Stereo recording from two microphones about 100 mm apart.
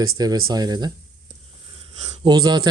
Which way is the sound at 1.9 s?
90° right.